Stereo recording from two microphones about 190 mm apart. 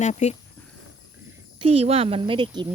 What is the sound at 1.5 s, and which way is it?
Speech, 30° right (ahead or behind).